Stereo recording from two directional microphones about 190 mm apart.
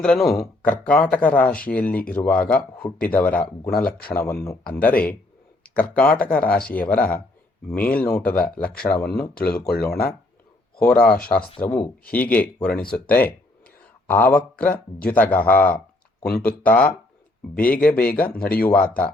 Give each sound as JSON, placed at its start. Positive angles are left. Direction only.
{"t": 0.0, "sound": "speech", "side_deg": 0}
{"t": 9.3, "sound": "speech", "side_deg": 55}
{"t": 10.8, "sound": "speech", "side_deg": 5}
{"t": 16.3, "sound": "speech", "side_deg": 55}
{"t": 16.6, "sound": "speech", "side_deg": 10}
{"t": 18.3, "sound": "speech", "side_deg": 50}
{"t": 18.6, "sound": "speech", "side_deg": 10}